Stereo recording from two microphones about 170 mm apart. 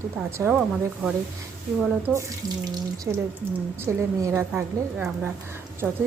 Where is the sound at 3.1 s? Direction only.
15° right (ahead or behind).